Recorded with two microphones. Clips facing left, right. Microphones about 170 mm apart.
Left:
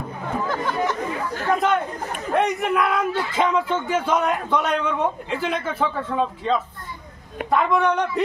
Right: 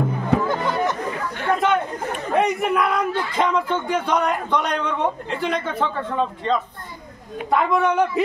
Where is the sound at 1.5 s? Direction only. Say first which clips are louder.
Right 1 dB; centre (ahead or behind).